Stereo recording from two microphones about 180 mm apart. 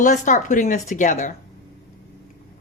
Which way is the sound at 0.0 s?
40° left (ahead or behind).